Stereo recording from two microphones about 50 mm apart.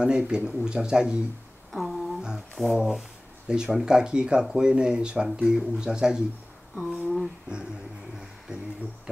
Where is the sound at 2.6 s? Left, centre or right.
Centre.